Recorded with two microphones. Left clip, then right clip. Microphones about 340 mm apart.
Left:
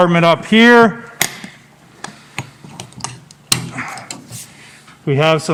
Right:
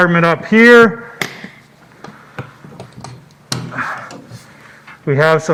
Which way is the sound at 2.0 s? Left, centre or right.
Left.